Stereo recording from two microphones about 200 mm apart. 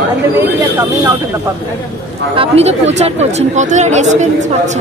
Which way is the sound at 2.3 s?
30° right (ahead or behind).